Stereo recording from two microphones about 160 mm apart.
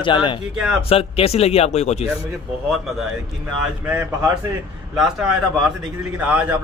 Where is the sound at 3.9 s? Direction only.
15° right (ahead or behind).